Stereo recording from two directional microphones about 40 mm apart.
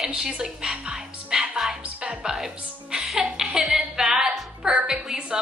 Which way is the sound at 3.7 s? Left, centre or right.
Right.